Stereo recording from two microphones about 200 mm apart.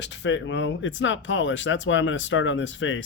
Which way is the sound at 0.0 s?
60° left (ahead or behind).